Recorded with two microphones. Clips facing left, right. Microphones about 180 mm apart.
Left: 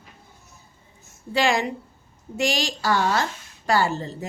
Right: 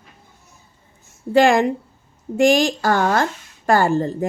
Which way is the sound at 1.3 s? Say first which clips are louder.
Right 8 dB; 50° right (ahead or behind).